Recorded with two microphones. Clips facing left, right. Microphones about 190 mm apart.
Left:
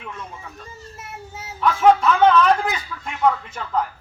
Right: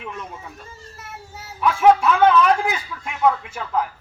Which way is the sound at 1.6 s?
10° right (ahead or behind).